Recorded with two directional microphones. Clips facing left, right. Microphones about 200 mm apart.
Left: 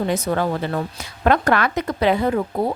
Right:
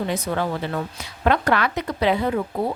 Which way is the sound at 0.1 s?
45° left (ahead or behind).